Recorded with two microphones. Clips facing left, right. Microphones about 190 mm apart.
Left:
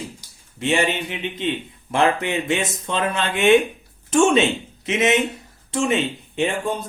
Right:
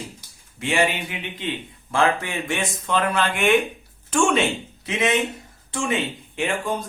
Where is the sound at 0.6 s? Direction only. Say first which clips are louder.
Left 1 dB; 20° left (ahead or behind).